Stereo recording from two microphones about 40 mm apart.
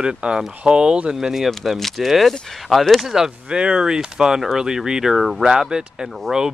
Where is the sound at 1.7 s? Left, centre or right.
Centre.